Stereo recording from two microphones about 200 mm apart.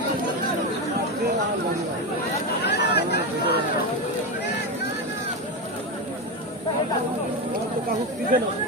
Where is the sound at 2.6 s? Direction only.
55° left (ahead or behind).